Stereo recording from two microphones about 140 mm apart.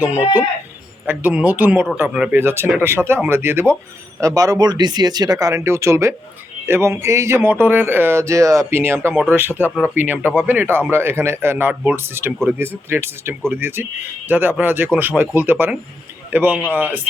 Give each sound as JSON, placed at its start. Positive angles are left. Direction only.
{"t": 1.0, "sound": "speech", "side_deg": -10}